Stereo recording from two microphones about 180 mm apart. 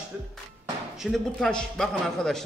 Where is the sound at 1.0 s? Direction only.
Centre (ahead or behind).